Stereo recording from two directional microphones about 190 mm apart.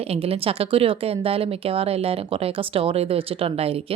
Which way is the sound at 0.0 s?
30° right (ahead or behind).